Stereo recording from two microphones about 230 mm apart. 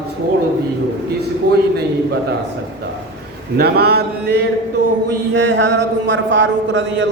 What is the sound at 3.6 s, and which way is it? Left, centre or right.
A man's voice, right.